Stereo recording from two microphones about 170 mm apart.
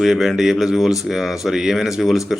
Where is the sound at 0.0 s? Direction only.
Centre (ahead or behind).